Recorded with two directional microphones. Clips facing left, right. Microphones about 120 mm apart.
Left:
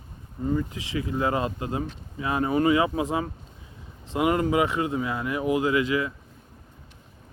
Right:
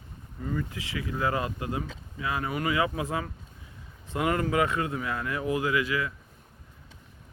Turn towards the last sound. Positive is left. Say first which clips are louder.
# left 4 dB
turn(degrees=25)  # may be behind; listen again after turning